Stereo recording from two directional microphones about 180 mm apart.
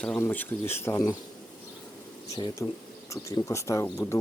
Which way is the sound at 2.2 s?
20° left (ahead or behind).